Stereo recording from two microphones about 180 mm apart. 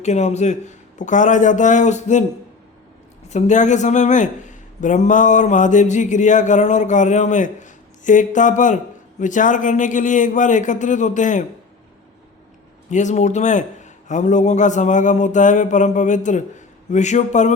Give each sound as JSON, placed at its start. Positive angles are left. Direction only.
{"t": 0.0, "sound": "a man's voice", "side_deg": 40}
{"t": 3.2, "sound": "a man's voice", "side_deg": 40}
{"t": 12.9, "sound": "a man's voice", "side_deg": 40}